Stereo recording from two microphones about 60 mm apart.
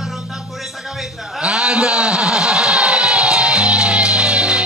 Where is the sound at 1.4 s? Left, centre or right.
Centre.